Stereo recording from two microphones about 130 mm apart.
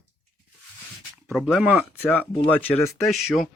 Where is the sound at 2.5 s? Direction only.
15° left (ahead or behind).